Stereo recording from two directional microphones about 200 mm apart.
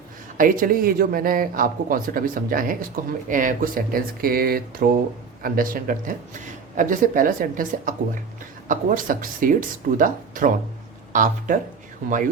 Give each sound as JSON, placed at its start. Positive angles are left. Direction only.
{"t": 0.3, "sound": "speech", "side_deg": -45}